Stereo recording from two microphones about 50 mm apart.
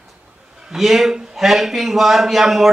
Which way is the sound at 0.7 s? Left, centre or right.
Centre.